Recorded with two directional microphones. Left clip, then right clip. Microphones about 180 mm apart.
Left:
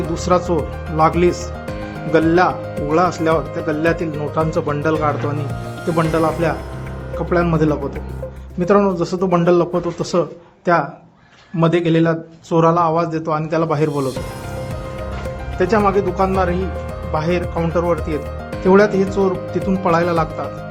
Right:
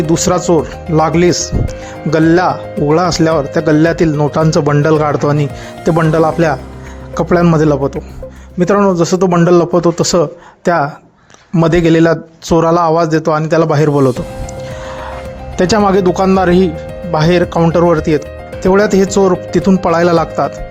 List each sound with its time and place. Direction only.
0.1 s a man's voice: 35° right (ahead or behind)
8.5 s a man's voice: 30° right (ahead or behind)
15.5 s speech: 50° right (ahead or behind)